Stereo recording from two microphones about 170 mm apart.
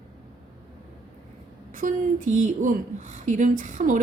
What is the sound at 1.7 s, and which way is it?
Speech, 50° right (ahead or behind).